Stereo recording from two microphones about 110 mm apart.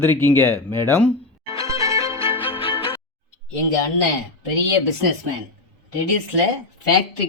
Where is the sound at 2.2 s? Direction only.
55° left (ahead or behind).